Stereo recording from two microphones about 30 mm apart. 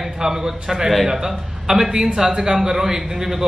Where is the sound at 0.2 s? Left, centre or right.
Centre.